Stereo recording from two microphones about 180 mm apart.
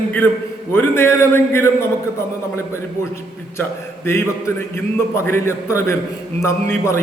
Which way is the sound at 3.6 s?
15° left (ahead or behind).